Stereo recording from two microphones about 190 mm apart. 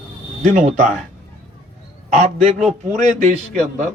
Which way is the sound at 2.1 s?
35° right (ahead or behind).